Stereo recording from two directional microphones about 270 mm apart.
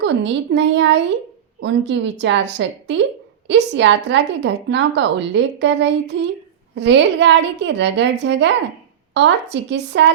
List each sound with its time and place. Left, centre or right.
0.0 s a woman's voice: right